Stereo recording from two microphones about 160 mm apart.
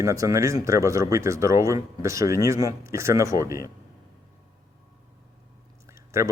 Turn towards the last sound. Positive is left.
turn(degrees=-20)  # may be behind; listen again after turning